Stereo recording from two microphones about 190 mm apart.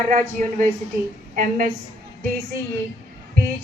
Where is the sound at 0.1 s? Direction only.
40° right (ahead or behind).